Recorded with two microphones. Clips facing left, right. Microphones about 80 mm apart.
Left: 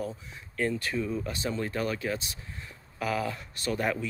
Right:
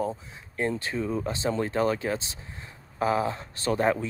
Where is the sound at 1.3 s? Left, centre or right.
Right.